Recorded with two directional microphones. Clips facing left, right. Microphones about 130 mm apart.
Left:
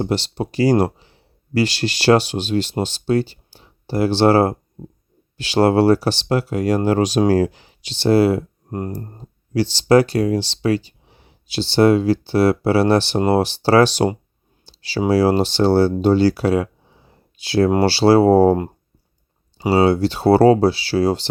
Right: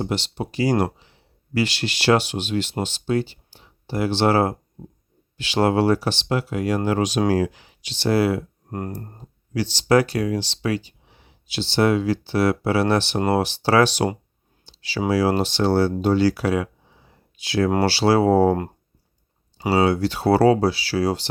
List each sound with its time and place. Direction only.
0.0 s speech: 35° left (ahead or behind)
17.1 s a sound: 30° left (ahead or behind)
17.7 s speech: 25° left (ahead or behind)
19.7 s speech: 30° left (ahead or behind)